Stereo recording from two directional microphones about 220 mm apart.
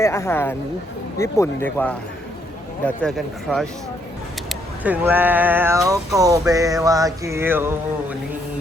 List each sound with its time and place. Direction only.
0.0 s speech: 10° left (ahead or behind); by 6.0 s 15° right (ahead or behind)
6.1 s music: 15° right (ahead or behind)